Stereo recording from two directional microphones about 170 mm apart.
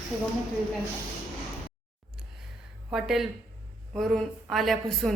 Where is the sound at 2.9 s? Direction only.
Centre (ahead or behind).